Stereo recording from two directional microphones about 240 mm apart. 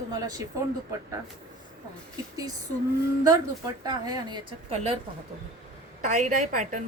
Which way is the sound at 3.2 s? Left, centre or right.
Centre.